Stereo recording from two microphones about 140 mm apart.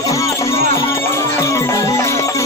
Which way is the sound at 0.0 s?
25° left (ahead or behind).